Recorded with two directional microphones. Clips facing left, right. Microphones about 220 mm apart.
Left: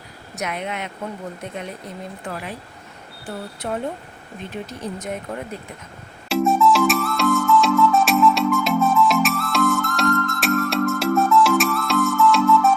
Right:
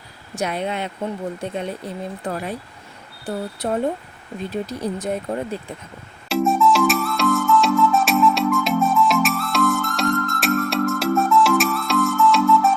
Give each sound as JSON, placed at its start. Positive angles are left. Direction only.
{"t": 0.3, "sound": "speech", "side_deg": -30}
{"t": 6.2, "sound": "music", "side_deg": 0}